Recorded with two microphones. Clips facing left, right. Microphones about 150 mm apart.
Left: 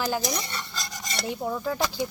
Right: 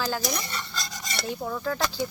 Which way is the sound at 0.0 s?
15° left (ahead or behind).